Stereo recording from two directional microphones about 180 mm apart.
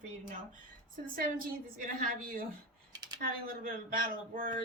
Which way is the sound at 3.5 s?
50° right (ahead or behind).